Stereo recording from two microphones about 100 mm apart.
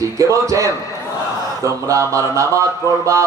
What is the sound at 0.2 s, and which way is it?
Speech, 30° right (ahead or behind).